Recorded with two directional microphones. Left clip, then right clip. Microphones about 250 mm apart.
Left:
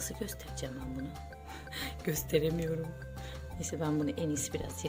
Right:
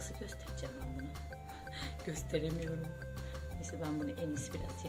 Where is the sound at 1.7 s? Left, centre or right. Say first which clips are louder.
Left 8 dB; left.